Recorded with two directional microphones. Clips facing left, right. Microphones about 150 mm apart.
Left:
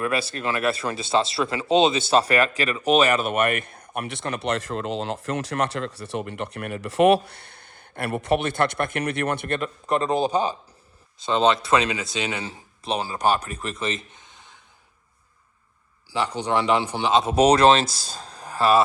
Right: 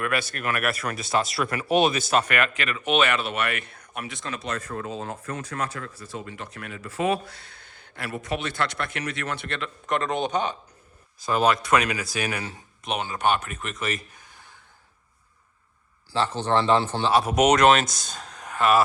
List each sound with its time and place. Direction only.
0.0 s speech: 30° left (ahead or behind); by 3.8 s 50° left (ahead or behind)
3.9 s speech: 60° left (ahead or behind)
7.8 s speech: 55° left (ahead or behind)
9.8 s speech: 35° left (ahead or behind)
16.1 s speech: 15° left (ahead or behind); by 18.8 s 30° left (ahead or behind)